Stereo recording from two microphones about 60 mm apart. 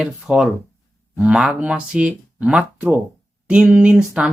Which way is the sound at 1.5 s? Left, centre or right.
Centre.